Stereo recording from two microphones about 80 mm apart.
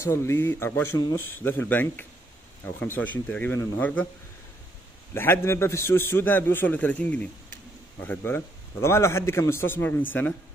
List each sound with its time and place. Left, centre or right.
0.0 s a man's voice: left
5.1 s a man's voice: left